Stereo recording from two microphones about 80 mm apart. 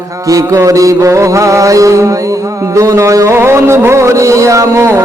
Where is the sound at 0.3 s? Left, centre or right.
Right.